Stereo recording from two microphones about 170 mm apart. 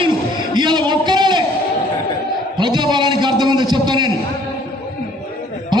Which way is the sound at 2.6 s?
25° right (ahead or behind).